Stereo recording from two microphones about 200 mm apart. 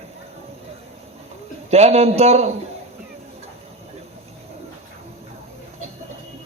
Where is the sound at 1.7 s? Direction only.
30° right (ahead or behind).